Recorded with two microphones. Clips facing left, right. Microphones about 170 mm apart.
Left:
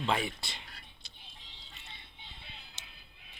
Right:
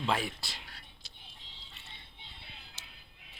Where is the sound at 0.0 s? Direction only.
Centre (ahead or behind).